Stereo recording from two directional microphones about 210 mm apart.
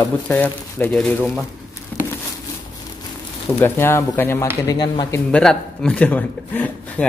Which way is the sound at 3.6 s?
10° left (ahead or behind).